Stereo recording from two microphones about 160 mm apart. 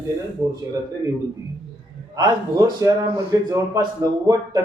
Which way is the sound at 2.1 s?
25° right (ahead or behind).